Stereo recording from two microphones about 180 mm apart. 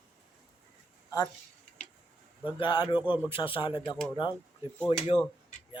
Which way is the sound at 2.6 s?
25° left (ahead or behind).